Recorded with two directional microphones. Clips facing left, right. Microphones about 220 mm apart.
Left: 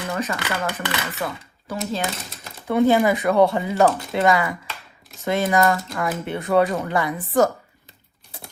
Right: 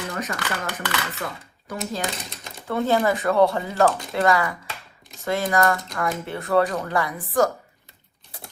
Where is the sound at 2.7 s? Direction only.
15° left (ahead or behind).